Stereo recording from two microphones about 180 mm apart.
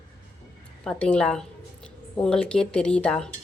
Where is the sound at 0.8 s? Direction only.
5° left (ahead or behind).